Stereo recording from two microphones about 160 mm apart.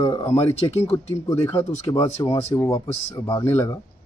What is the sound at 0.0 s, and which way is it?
A man's voice, 20° left (ahead or behind).